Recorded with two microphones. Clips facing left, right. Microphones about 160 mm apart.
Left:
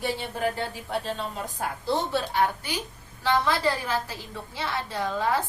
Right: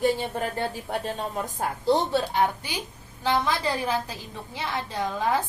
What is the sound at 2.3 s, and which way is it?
A woman's voice, 20° right (ahead or behind).